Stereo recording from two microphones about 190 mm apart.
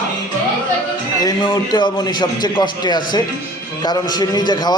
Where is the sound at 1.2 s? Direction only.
20° left (ahead or behind).